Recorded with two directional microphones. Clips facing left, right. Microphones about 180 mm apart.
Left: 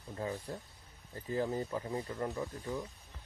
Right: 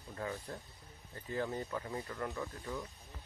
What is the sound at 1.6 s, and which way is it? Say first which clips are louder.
Speech: left 3 dB; 25° left (ahead or behind).